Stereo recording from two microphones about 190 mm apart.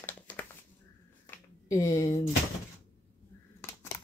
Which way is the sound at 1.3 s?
15° left (ahead or behind).